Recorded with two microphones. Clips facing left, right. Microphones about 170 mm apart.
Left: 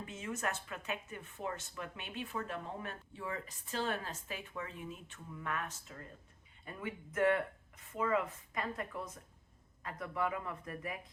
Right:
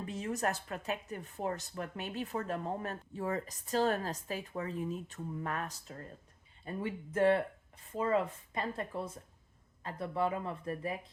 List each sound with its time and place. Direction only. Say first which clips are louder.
0.0 s speech: right 5 dB; 35° right (ahead or behind)